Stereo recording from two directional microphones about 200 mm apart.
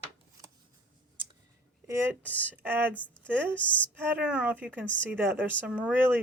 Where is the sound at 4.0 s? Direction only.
5° right (ahead or behind).